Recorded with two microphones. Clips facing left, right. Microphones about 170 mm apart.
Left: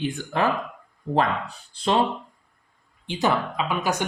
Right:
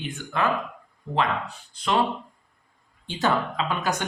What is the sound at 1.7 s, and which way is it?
Speech, 30° left (ahead or behind).